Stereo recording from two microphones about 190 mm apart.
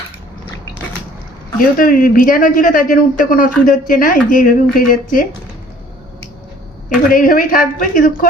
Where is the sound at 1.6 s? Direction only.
50° left (ahead or behind).